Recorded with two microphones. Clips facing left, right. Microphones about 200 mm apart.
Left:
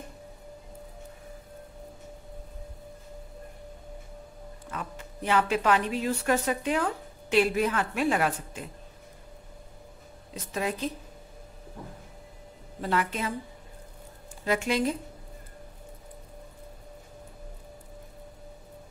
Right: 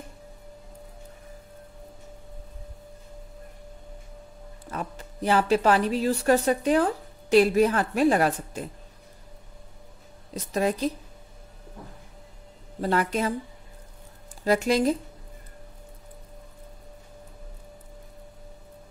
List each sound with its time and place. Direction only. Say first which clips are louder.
4.6 s speech: right 4 dB; 35° right (ahead or behind)
10.3 s speech: right 6 dB; 40° right (ahead or behind)
12.8 s speech: right 4 dB; 40° right (ahead or behind)
14.4 s speech: right 5 dB; 40° right (ahead or behind)